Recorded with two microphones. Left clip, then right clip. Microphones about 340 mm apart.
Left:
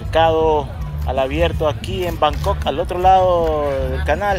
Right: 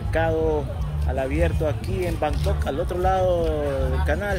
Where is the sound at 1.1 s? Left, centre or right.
Centre.